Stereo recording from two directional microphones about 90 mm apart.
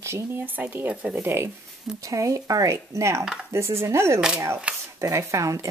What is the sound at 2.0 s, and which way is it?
Speech, 35° right (ahead or behind).